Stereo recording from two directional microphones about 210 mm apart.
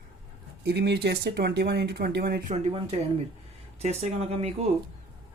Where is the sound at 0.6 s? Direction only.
50° right (ahead or behind).